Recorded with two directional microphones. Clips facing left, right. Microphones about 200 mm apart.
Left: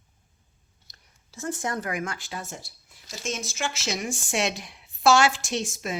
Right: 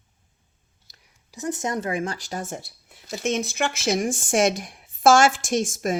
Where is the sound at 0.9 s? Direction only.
20° right (ahead or behind).